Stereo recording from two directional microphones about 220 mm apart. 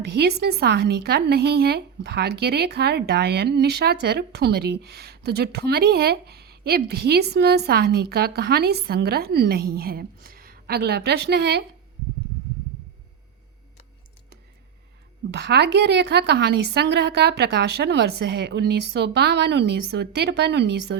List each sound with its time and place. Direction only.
0.0 s speech: 45° right (ahead or behind)
15.3 s speech: 50° right (ahead or behind)